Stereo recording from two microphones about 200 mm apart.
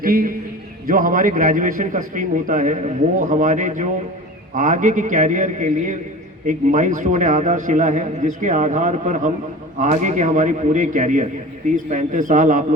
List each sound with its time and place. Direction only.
0.0 s a man's voice: 45° right (ahead or behind)